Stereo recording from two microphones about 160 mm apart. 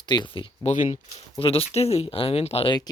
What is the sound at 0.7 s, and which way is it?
Speech, 50° left (ahead or behind).